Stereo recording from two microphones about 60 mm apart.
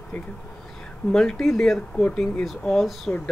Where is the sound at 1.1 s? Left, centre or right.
Centre.